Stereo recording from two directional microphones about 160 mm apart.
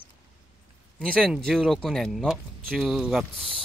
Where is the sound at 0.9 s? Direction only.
5° left (ahead or behind).